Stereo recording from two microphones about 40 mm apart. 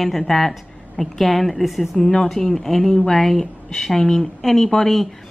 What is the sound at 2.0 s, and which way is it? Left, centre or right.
Speech, left.